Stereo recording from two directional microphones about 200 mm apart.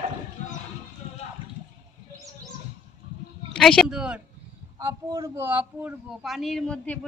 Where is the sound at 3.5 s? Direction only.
5° left (ahead or behind).